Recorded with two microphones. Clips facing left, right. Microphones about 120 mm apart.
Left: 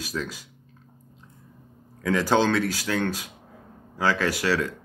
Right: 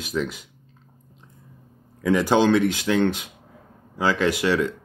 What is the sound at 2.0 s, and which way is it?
Speech, 15° right (ahead or behind).